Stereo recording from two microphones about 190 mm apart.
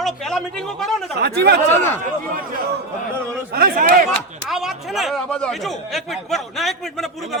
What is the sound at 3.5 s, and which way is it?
Speech, 50° right (ahead or behind).